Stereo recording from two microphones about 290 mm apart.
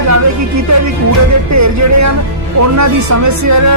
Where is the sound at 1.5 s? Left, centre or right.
Right.